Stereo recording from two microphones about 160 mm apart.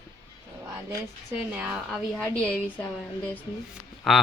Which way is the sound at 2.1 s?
10° left (ahead or behind).